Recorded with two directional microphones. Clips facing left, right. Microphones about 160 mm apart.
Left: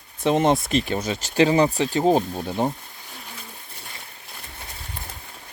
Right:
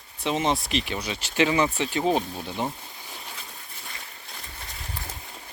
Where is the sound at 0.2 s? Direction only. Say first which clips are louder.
Left 6 dB; 50° left (ahead or behind).